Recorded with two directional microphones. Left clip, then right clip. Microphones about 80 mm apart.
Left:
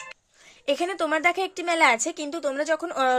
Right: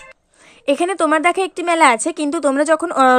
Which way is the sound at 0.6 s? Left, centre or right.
Right.